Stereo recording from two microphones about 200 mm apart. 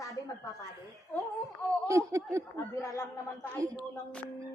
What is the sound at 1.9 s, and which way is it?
Speech, 15° right (ahead or behind).